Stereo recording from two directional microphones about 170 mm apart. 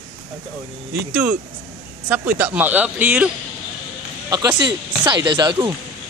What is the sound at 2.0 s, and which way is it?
Speech, 10° right (ahead or behind).